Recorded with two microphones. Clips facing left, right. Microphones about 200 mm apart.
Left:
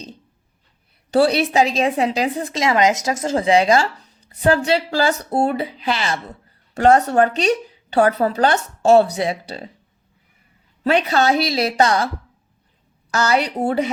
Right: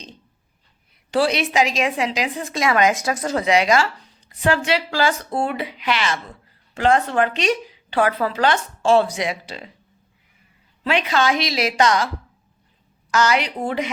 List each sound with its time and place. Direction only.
1.1 s speech: 35° left (ahead or behind)
2.5 s speech: 25° left (ahead or behind)
10.8 s speech: 35° left (ahead or behind)
13.1 s speech: 35° left (ahead or behind)